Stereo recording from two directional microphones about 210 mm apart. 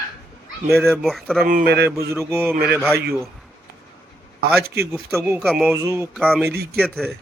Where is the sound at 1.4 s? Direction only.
40° right (ahead or behind).